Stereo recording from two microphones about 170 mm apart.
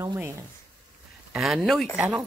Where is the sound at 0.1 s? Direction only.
15° right (ahead or behind).